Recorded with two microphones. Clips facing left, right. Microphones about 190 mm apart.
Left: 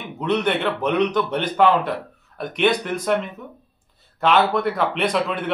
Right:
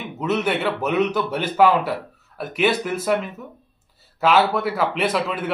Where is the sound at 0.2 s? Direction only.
5° right (ahead or behind).